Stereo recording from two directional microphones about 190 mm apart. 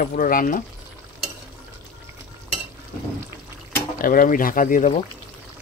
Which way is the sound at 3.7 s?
45° left (ahead or behind).